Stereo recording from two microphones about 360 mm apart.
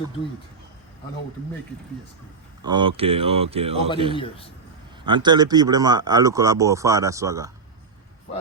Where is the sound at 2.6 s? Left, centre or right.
Centre.